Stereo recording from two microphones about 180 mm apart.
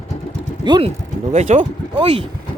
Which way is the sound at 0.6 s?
25° right (ahead or behind).